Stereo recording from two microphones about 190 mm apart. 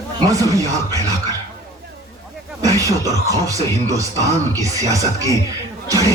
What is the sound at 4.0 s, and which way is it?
Speech, 15° right (ahead or behind).